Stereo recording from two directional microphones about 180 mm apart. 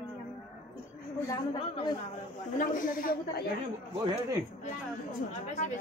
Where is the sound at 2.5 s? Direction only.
50° left (ahead or behind).